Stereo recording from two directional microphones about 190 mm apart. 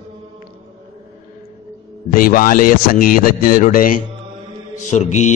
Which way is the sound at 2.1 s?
45° left (ahead or behind).